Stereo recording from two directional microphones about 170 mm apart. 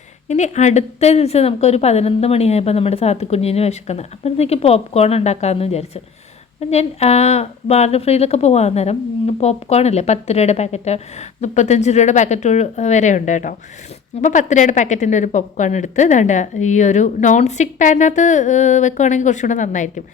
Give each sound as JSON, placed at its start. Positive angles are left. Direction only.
{"t": 0.3, "sound": "a woman's voice", "side_deg": 45}